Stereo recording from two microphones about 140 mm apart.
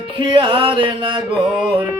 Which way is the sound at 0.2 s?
35° right (ahead or behind).